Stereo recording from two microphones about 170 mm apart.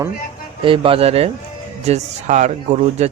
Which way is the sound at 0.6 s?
30° right (ahead or behind).